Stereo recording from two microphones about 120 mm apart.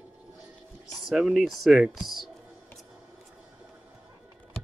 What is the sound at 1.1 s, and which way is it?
A man's voice, 5° right (ahead or behind).